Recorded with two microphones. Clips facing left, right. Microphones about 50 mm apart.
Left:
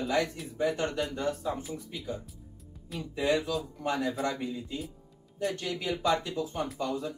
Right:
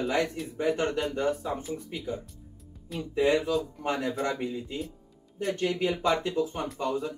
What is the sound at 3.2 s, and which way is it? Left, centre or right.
Speech, right.